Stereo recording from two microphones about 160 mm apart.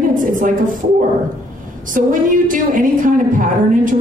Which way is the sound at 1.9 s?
60° right (ahead or behind).